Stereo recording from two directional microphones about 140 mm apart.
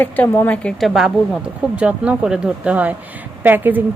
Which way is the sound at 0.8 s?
Centre (ahead or behind).